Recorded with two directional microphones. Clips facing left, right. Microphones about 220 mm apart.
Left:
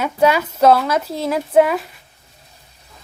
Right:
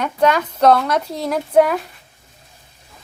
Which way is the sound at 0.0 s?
10° left (ahead or behind).